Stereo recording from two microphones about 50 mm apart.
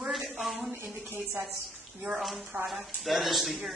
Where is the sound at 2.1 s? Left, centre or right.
Centre.